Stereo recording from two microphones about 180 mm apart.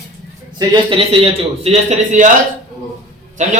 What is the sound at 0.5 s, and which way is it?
A man's voice, 30° right (ahead or behind).